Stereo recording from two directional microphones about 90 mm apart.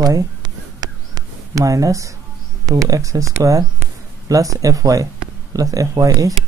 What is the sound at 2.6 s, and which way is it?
Speech, 40° right (ahead or behind).